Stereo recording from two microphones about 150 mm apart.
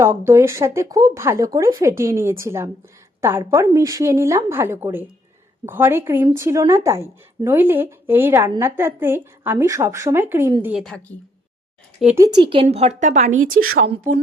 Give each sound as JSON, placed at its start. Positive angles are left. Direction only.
{"t": 0.0, "sound": "a woman's voice", "side_deg": -15}
{"t": 10.8, "sound": "a woman's voice", "side_deg": 5}
{"t": 12.4, "sound": "speech", "side_deg": -35}
{"t": 12.6, "sound": "a woman's voice", "side_deg": -45}
{"t": 13.5, "sound": "speech", "side_deg": -75}